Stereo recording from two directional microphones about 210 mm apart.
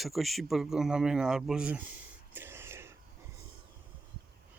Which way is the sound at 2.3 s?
10° right (ahead or behind).